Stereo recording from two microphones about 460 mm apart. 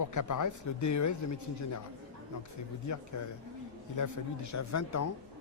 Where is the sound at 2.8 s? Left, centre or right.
Left.